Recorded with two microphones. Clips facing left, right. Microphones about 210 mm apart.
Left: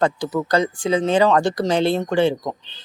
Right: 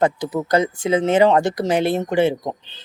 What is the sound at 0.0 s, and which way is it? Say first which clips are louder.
Speech: right 1 dB; 20° right (ahead or behind).